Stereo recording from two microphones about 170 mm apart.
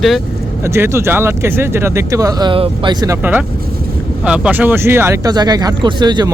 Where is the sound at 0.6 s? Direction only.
15° right (ahead or behind).